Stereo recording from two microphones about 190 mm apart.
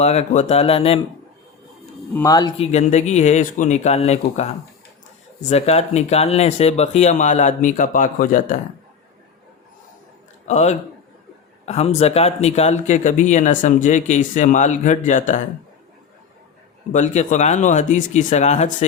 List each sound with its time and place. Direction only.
0.0 s speech: 35° left (ahead or behind)
2.1 s speech: 20° left (ahead or behind)
2.6 s speech: 35° left (ahead or behind)
10.4 s a man's voice: 35° left (ahead or behind)
16.9 s speech: 40° left (ahead or behind)